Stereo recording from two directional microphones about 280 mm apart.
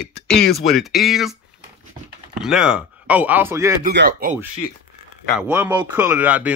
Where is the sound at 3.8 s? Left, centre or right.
Right.